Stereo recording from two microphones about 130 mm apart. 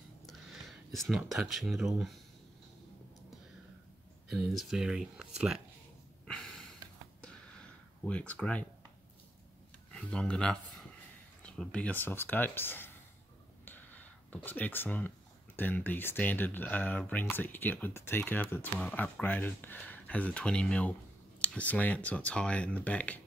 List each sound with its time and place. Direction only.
0.3 s speech: centre (ahead or behind)
4.3 s speech: centre (ahead or behind)
6.2 s a sound: 5° left (ahead or behind)
8.0 s speech: 10° left (ahead or behind)
9.9 s speech: 10° left (ahead or behind)